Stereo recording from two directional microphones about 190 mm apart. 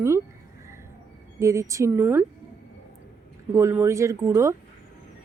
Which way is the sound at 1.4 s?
15° right (ahead or behind).